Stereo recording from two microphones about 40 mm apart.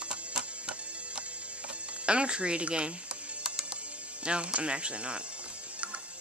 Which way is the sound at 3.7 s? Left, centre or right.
Right.